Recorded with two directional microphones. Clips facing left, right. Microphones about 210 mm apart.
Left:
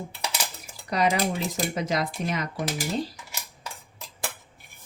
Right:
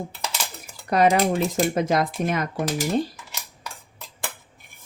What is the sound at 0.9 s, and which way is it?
Cutlery, 50° right (ahead or behind).